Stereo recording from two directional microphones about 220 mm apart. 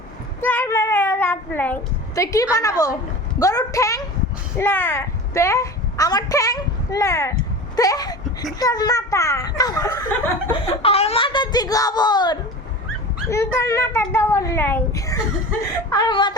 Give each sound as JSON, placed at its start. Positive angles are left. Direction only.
{"t": 0.4, "sound": "a sound", "side_deg": 10}
{"t": 3.3, "sound": "a child's voice", "side_deg": 15}
{"t": 10.5, "sound": "a child's voice", "side_deg": 25}